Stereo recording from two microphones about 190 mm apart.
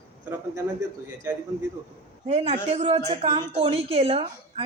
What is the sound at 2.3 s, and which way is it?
A woman's voice, 35° right (ahead or behind).